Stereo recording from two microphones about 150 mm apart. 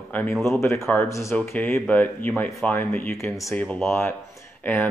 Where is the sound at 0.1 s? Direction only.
10° left (ahead or behind).